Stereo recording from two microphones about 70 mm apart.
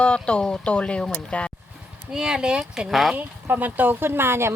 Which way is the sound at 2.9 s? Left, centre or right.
Centre.